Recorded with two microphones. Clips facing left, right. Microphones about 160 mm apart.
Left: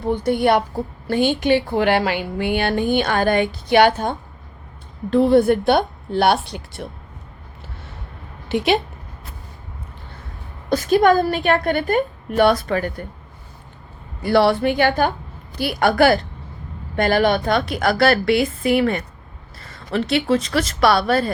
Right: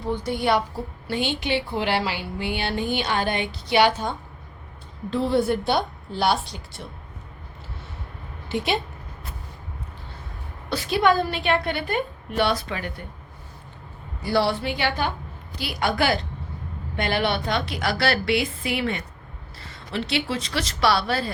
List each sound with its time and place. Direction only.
0.0 s a woman's voice: 55° left (ahead or behind)
5.1 s a woman's voice: 55° left (ahead or behind)
8.4 s a woman's voice: 80° left
10.7 s a woman's voice: 45° left (ahead or behind)
14.2 s a woman's voice: 60° left (ahead or behind)